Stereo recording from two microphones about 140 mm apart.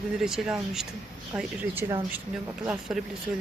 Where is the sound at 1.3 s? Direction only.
15° right (ahead or behind).